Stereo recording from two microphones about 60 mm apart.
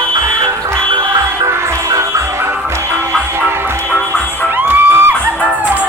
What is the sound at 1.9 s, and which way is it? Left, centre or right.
Music, right.